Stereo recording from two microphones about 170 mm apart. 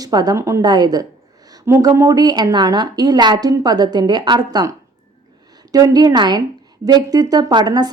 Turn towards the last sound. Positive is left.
turn(degrees=-25)  # may be behind; listen again after turning